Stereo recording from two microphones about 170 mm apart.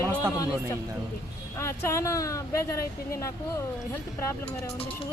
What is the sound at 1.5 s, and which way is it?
Speech, 15° left (ahead or behind).